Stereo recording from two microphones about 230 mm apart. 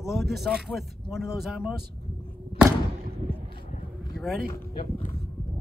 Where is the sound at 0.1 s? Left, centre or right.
Centre.